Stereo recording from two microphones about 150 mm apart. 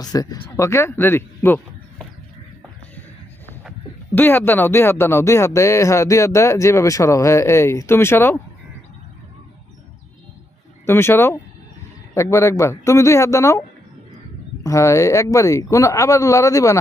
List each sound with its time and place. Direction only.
0.0 s speech: 25° left (ahead or behind)
4.1 s speech: 15° left (ahead or behind)
10.8 s speech: 15° left (ahead or behind)
14.6 s speech: 20° left (ahead or behind)